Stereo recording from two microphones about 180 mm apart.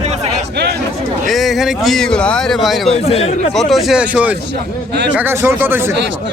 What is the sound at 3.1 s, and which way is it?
Speech, 35° left (ahead or behind).